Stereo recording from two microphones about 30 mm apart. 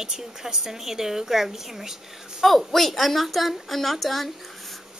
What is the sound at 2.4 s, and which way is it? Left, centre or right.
A woman's voice, centre.